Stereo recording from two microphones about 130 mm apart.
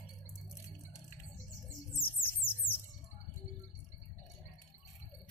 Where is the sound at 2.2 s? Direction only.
15° left (ahead or behind).